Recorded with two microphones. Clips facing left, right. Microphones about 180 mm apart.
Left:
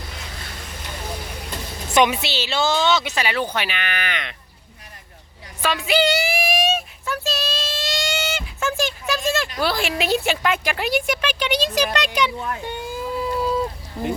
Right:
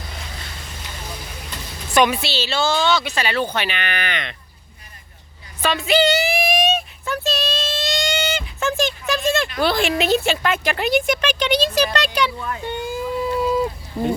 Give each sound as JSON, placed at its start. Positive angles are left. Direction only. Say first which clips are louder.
{"t": 1.9, "sound": "speech", "louder": "right 1 dB", "side_deg": 20}
{"t": 5.6, "sound": "child singing", "louder": "right 2 dB", "side_deg": 10}
{"t": 9.6, "sound": "speech", "louder": "right 3 dB", "side_deg": 5}
{"t": 12.7, "sound": "a sound", "louder": "right 3 dB", "side_deg": 0}